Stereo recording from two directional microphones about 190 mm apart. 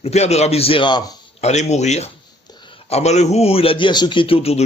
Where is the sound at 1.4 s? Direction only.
35° left (ahead or behind).